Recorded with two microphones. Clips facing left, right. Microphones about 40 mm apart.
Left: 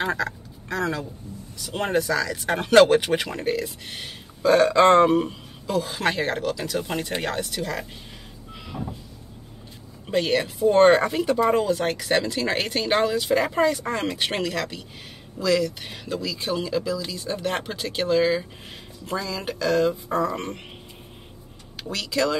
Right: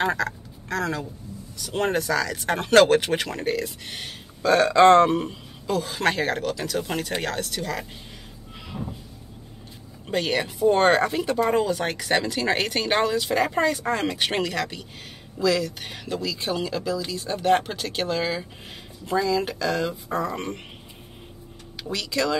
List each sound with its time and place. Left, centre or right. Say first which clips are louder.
0.2 s duck: even; centre
1.6 s speech: even; centre
8.8 s a sound: left 1 dB; centre
10.0 s speech: left 2 dB; centre
21.8 s speech: left 1 dB; centre